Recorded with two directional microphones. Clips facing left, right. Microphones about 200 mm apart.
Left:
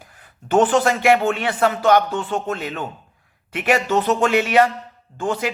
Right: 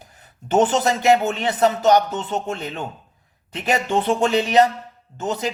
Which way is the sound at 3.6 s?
25° right (ahead or behind).